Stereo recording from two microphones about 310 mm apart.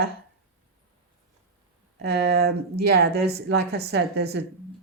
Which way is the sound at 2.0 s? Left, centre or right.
Right.